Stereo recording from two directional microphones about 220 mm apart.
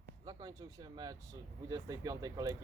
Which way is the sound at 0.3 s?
15° right (ahead or behind).